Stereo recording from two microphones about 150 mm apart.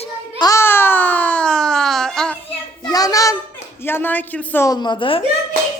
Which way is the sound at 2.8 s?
25° left (ahead or behind).